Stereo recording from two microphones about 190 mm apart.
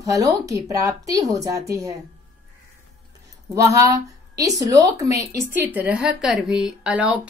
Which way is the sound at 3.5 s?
15° right (ahead or behind).